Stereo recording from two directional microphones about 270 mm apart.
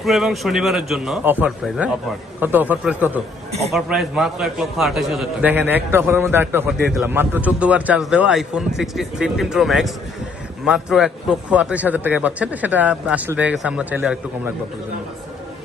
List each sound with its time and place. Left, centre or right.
0.0 s a man's voice: centre